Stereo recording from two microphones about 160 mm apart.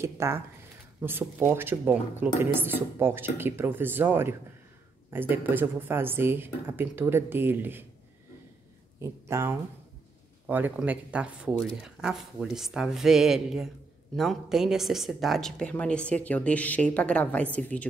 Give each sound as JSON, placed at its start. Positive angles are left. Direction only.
{"t": 0.0, "sound": "speech", "side_deg": -15}
{"t": 9.0, "sound": "speech", "side_deg": -15}